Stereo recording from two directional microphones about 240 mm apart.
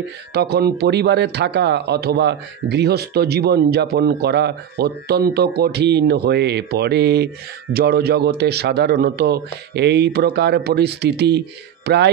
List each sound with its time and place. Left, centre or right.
0.3 s speech: right